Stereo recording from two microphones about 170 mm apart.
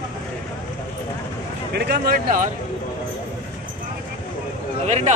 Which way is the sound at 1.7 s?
75° right (ahead or behind).